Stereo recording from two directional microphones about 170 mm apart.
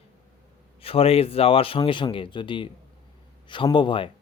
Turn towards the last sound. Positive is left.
turn(degrees=30)  # may be behind; listen again after turning